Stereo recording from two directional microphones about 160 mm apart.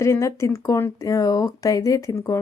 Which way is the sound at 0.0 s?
20° left (ahead or behind).